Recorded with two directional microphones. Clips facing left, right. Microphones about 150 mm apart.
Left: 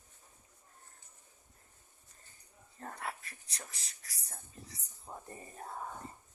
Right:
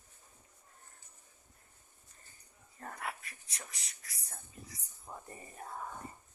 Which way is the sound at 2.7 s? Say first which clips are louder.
Even; 30° left (ahead or behind).